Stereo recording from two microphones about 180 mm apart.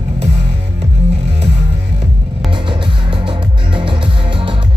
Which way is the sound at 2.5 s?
25° right (ahead or behind).